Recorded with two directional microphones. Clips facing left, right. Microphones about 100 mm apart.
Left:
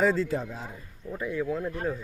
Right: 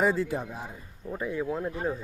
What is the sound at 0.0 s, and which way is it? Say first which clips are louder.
Speech: left 1 dB; 15° right (ahead or behind).